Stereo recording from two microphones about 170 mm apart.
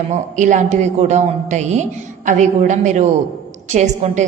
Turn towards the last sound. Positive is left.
turn(degrees=-45)  # may be behind; listen again after turning